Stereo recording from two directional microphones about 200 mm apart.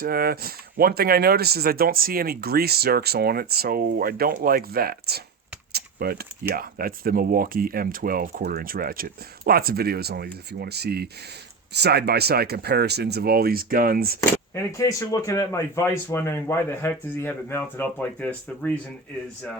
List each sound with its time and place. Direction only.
0.0 s speech: 50° right (ahead or behind)
5.7 s keys jangling: 50° right (ahead or behind)
6.5 s speech: 50° right (ahead or behind)
14.5 s a man's voice: 15° left (ahead or behind)